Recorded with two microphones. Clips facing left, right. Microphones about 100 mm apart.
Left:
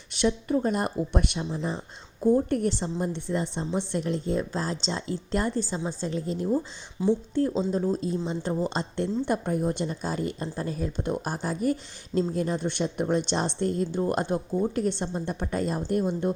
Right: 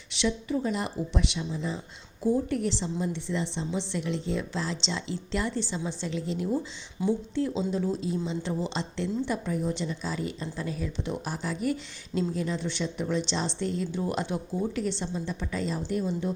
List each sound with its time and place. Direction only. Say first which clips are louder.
0.1 s speech: left 4 dB; 45° left (ahead or behind)
2.3 s speech: left 4 dB; 50° left (ahead or behind)